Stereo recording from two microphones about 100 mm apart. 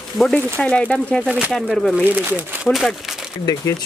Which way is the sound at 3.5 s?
45° left (ahead or behind).